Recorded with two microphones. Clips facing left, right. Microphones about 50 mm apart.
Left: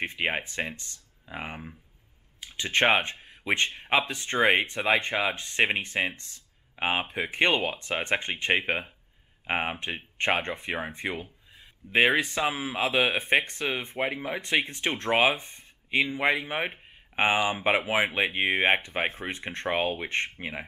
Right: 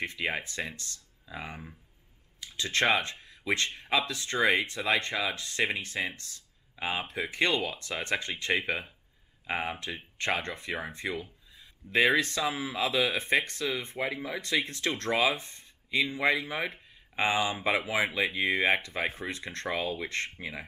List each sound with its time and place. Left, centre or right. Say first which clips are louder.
0.0 s speech: left 3 dB; left
6.3 s a sound: left 1 dB; left
7.1 s speech: left 1 dB; left
12.1 s speech: left 1 dB; centre
12.4 s speech: left 3 dB; left
15.3 s a sound: left 2 dB; left
16.1 s speech: left 2 dB; left